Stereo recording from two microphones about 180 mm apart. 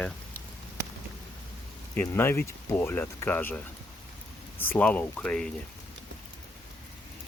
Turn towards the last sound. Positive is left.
turn(degrees=5)  # may be behind; listen again after turning